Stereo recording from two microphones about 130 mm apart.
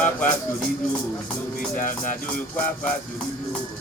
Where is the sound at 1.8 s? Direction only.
90° left.